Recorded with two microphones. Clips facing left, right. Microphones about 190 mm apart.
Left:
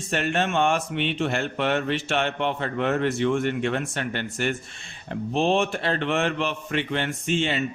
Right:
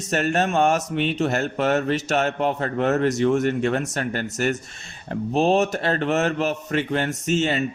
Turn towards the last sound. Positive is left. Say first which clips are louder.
# right 3 dB
turn(degrees=-40)  # may be behind; listen again after turning